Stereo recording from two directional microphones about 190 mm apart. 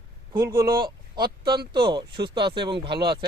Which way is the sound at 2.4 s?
25° right (ahead or behind).